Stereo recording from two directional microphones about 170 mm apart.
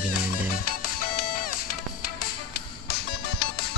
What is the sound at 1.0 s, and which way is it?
Music, 60° left (ahead or behind).